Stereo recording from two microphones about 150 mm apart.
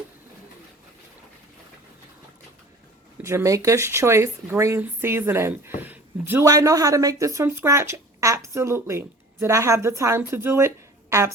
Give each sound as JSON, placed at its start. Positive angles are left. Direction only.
{"t": 3.2, "sound": "speech", "side_deg": -20}